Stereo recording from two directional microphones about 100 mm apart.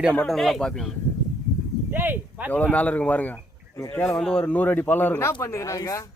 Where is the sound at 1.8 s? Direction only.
20° right (ahead or behind).